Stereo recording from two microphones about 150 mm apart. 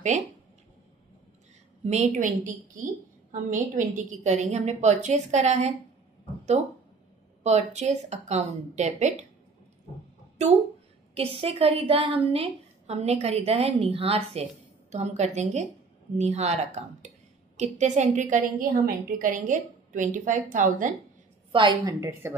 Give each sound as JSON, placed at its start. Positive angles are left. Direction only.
{"t": 1.9, "sound": "a woman's voice", "side_deg": -50}
{"t": 7.4, "sound": "a woman's voice", "side_deg": -45}
{"t": 11.1, "sound": "a woman's voice", "side_deg": -40}
{"t": 21.5, "sound": "a woman's voice", "side_deg": -30}
{"t": 22.2, "sound": "speech", "side_deg": -15}